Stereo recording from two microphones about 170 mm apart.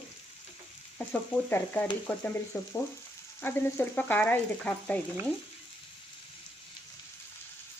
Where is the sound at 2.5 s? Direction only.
20° left (ahead or behind).